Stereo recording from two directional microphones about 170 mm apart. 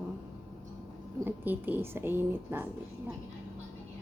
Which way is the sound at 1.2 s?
10° right (ahead or behind).